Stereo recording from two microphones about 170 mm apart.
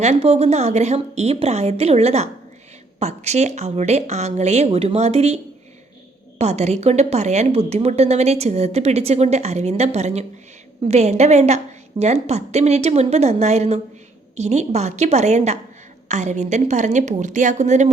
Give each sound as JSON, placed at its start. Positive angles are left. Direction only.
{"t": 0.0, "sound": "a woman's voice", "side_deg": -40}
{"t": 6.4, "sound": "a woman's voice", "side_deg": -40}